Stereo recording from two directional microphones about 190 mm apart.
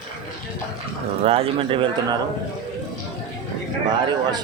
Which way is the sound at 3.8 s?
25° right (ahead or behind).